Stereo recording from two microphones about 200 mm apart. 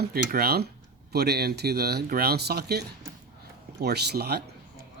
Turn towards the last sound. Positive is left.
turn(degrees=-55)  # may be behind; listen again after turning